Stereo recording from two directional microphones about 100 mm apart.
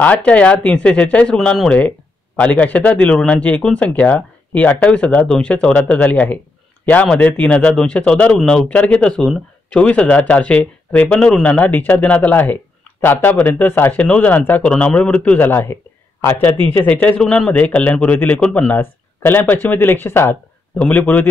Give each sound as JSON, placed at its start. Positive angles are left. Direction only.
{"t": 0.0, "sound": "a man's voice", "side_deg": 15}
{"t": 20.7, "sound": "a man's voice", "side_deg": 10}